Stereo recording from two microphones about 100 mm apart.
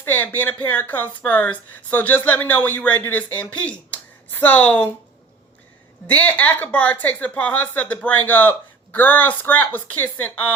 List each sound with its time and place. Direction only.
0.0 s speech: 20° left (ahead or behind)
6.1 s speech: 15° left (ahead or behind)